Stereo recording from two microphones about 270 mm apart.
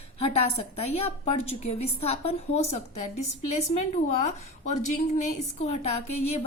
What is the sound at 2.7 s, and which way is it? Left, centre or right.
Speech, left.